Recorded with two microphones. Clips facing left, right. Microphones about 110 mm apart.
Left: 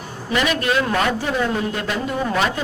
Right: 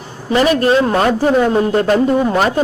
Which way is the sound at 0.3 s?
35° right (ahead or behind).